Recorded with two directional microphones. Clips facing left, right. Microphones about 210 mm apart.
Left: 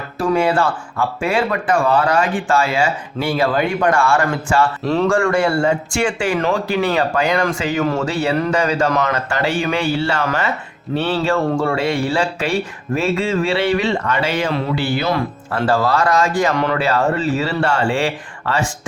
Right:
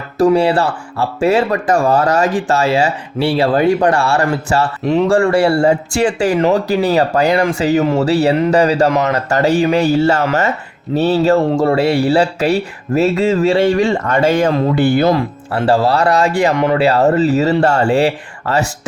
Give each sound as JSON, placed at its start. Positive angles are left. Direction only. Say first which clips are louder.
{"t": 0.2, "sound": "speech", "louder": "right 5 dB", "side_deg": -35}
{"t": 7.8, "sound": "speech", "louder": "right 3 dB", "side_deg": -20}
{"t": 8.0, "sound": "speech", "louder": "right 6 dB", "side_deg": -35}
{"t": 15.5, "sound": "speech", "louder": "right 4 dB", "side_deg": -30}
{"t": 16.8, "sound": "speech", "louder": "right 6 dB", "side_deg": -35}